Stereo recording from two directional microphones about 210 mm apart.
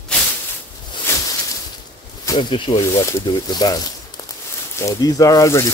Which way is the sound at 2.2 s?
20° left (ahead or behind).